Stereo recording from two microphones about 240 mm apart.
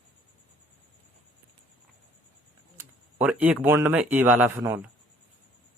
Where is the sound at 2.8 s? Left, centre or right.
Centre.